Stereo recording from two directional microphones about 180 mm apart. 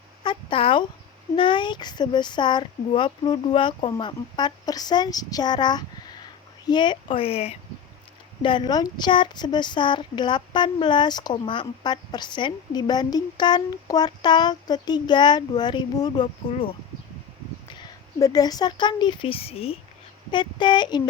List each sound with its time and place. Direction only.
0.2 s a sound: 30° left (ahead or behind)
1.4 s speech: 25° left (ahead or behind)
17.7 s speech: 20° left (ahead or behind)